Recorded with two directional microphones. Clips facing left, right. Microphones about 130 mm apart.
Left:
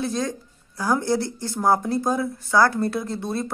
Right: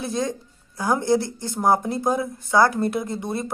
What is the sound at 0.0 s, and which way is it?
Speech, 20° right (ahead or behind).